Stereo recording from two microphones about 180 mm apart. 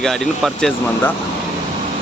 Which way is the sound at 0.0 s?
Centre (ahead or behind).